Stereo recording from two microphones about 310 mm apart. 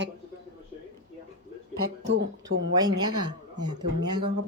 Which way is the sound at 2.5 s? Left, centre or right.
Right.